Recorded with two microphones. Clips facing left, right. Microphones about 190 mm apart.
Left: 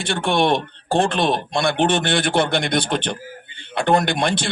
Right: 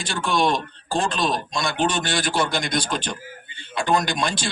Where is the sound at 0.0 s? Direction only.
60° left (ahead or behind).